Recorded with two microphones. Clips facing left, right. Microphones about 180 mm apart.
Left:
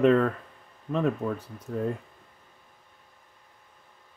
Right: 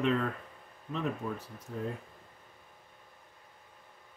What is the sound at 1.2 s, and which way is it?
Speech, 90° left.